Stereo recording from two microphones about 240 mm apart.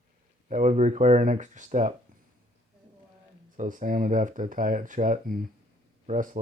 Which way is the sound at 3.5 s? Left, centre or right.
Right.